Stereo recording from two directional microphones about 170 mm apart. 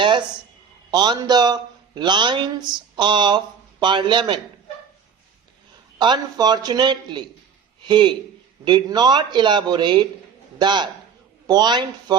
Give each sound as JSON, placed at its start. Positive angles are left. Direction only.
{"t": 0.9, "sound": "a man's voice", "side_deg": -25}
{"t": 6.0, "sound": "a man's voice", "side_deg": -25}